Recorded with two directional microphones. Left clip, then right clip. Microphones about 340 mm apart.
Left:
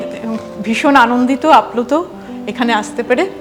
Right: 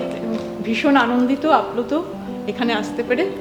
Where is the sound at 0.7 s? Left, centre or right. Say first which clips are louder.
Left 7 dB; left.